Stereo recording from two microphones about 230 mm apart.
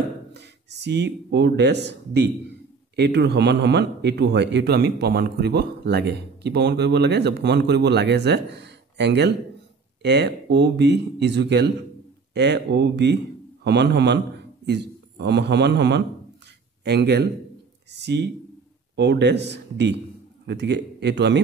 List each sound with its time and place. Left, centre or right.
0.3 s a man's voice: right